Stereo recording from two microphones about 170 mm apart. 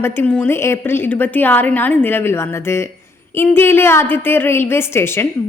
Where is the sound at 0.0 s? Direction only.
15° left (ahead or behind).